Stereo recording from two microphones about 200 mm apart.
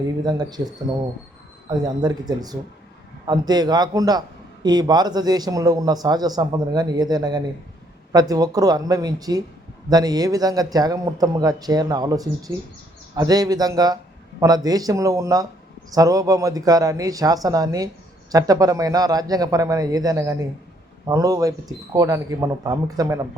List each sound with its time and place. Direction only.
0.2 s a man's voice: 20° right (ahead or behind)